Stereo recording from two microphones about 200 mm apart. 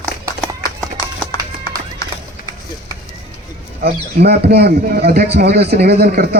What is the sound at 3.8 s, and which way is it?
A man's voice, 55° right (ahead or behind).